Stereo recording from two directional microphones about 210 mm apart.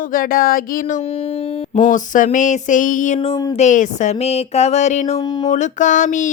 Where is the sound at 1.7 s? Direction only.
35° left (ahead or behind).